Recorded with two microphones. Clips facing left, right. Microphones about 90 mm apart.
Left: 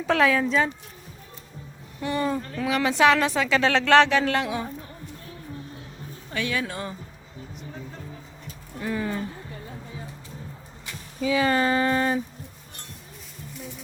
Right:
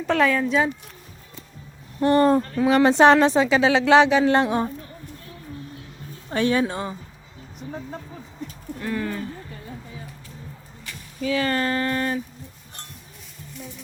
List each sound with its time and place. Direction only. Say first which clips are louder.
0.0 s a woman's voice: right 1 dB; centre (ahead or behind)
2.0 s speech: right 9 dB; 45° right (ahead or behind)
2.6 s a woman's voice: right 5 dB; 35° right (ahead or behind)
3.6 s speech: right 1 dB; 10° right (ahead or behind)
4.3 s a woman's voice: right 6 dB; 35° right (ahead or behind)
6.3 s a woman's voice: right 7 dB; 35° right (ahead or behind)
8.8 s speech: even; 10° left (ahead or behind)
10.8 s speech: even; 15° left (ahead or behind)